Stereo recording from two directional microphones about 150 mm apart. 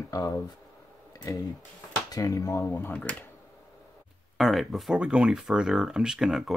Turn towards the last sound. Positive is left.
turn(degrees=0)  # may be behind; listen again after turning